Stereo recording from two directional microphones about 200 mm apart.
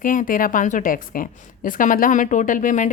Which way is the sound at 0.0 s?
40° left (ahead or behind).